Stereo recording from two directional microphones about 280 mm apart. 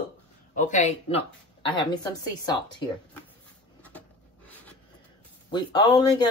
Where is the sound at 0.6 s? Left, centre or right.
Left.